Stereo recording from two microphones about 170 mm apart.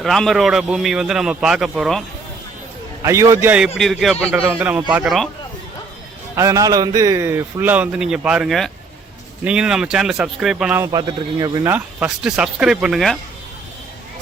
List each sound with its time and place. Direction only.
0.0 s a man's voice: centre (ahead or behind)
3.0 s a man's voice: 20° right (ahead or behind)
3.8 s a man's voice: centre (ahead or behind)
6.3 s a man's voice: 20° right (ahead or behind); by 10.8 s 5° right (ahead or behind)
10.8 s speech: 20° right (ahead or behind)
11.7 s a man's voice: 5° right (ahead or behind)